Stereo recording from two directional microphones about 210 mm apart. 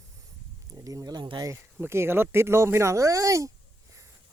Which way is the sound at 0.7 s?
15° right (ahead or behind).